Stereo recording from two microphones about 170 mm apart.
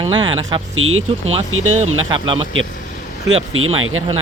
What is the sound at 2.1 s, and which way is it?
Speech, 30° right (ahead or behind).